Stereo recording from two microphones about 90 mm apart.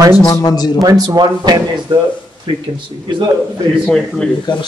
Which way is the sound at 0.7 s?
45° right (ahead or behind).